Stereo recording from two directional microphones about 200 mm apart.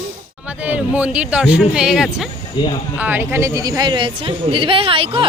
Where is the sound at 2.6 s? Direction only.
20° left (ahead or behind).